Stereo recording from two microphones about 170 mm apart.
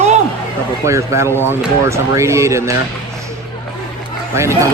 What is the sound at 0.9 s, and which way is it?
Speech, 15° right (ahead or behind).